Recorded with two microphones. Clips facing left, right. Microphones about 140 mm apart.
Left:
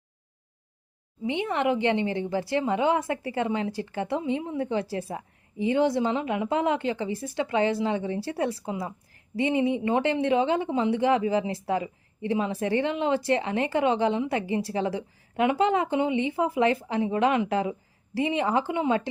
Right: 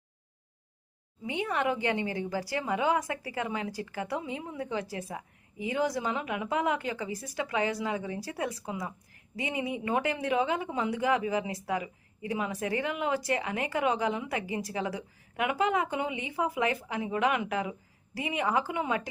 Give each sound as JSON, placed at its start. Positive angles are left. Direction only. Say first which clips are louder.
{"t": 1.2, "sound": "a woman's voice", "louder": "left 4 dB", "side_deg": 25}